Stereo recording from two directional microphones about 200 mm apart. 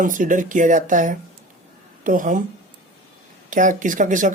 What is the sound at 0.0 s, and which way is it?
Speech, 40° right (ahead or behind).